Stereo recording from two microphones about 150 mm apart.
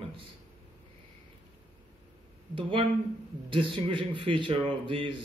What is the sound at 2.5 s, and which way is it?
A man's voice, 35° right (ahead or behind).